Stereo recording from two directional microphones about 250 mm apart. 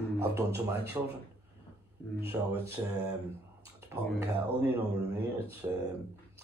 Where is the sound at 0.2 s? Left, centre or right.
Centre.